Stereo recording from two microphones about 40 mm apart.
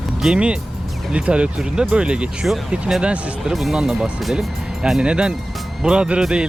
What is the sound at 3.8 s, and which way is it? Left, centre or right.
Speech, centre.